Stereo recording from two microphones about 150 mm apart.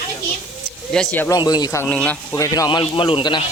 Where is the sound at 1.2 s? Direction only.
25° left (ahead or behind).